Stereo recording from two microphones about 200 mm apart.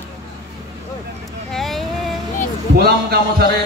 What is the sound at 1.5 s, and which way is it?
Vehicle, centre (ahead or behind).